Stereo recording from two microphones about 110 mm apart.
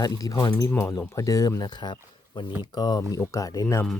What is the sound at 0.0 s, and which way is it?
Speech, 35° left (ahead or behind).